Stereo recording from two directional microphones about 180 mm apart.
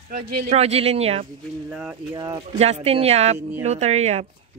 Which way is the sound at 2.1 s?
20° right (ahead or behind).